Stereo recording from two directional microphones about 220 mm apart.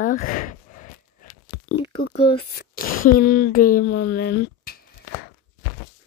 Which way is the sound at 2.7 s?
40° left (ahead or behind).